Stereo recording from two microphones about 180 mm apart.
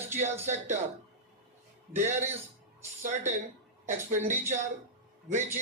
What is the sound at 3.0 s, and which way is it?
Speech, 40° right (ahead or behind).